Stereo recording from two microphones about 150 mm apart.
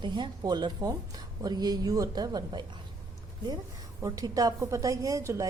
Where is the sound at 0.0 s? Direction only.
30° right (ahead or behind).